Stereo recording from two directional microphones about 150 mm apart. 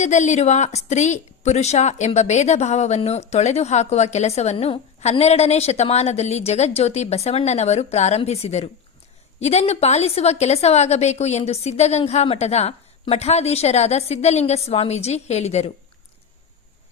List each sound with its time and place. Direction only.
0.0 s a woman's voice: 50° left (ahead or behind)